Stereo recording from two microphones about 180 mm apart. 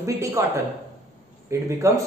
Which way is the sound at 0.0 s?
15° right (ahead or behind).